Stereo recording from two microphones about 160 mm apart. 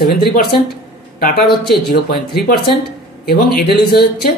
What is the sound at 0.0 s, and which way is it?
Speech, 75° left (ahead or behind).